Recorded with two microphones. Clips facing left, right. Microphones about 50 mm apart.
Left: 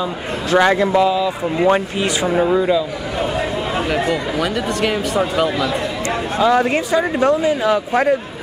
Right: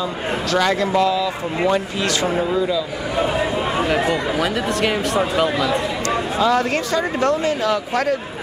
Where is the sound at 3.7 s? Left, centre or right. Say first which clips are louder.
Even; centre.